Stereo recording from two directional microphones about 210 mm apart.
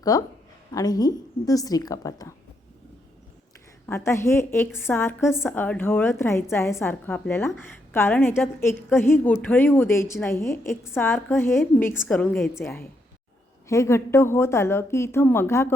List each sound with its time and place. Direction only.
0.0 s a woman's voice: 15° left (ahead or behind)
3.8 s a woman's voice: 15° left (ahead or behind)